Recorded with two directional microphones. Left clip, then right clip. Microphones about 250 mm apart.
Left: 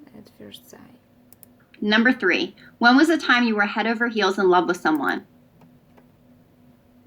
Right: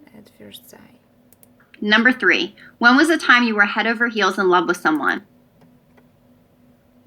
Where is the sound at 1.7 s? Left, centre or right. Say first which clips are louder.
Right 4 dB; right.